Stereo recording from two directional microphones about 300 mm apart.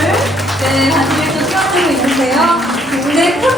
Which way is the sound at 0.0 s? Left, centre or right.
Centre.